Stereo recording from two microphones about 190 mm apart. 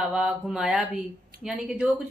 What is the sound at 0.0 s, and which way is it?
A woman's voice, 5° right (ahead or behind).